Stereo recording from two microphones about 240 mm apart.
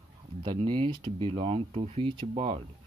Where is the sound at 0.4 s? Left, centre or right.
Right.